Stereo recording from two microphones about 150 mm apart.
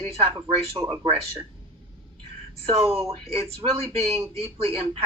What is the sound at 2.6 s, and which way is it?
Speech, 40° right (ahead or behind).